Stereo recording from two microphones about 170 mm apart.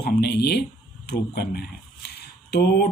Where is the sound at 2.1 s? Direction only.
70° left (ahead or behind).